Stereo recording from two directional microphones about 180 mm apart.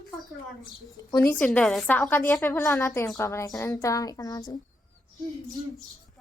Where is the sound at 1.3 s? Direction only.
5° left (ahead or behind).